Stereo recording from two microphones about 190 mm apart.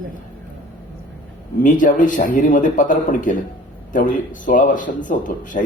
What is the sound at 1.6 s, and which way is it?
A man's voice, 45° left (ahead or behind).